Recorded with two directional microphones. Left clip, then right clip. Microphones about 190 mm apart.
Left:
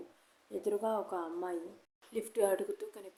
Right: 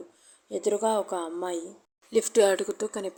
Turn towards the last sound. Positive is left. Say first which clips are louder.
# right 10 dB
turn(degrees=-40)  # may be behind; listen again after turning